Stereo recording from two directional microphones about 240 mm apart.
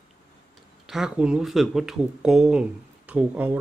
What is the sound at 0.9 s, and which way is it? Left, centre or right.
Speech, centre.